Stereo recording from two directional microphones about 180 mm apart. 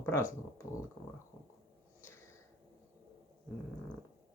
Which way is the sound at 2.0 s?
15° left (ahead or behind).